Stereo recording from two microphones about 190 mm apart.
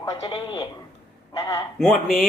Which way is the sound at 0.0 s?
25° left (ahead or behind).